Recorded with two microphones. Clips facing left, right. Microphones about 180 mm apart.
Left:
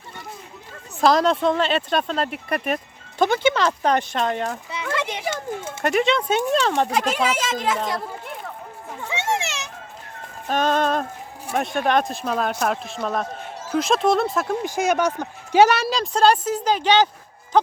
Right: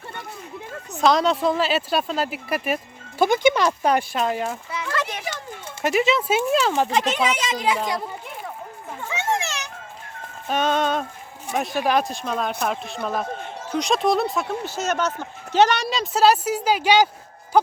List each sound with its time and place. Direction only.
1.0 s speech: centre (ahead or behind)
4.7 s children playing: 20° left (ahead or behind)
5.2 s speech: 50° left (ahead or behind)
5.8 s speech: 5° right (ahead or behind)
6.9 s speech: 5° left (ahead or behind)
10.5 s speech: centre (ahead or behind)
14.6 s speech: 10° left (ahead or behind); by 17.1 s 10° right (ahead or behind)